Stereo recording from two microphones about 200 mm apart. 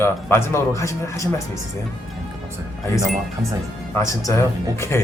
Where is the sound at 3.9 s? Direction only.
15° left (ahead or behind).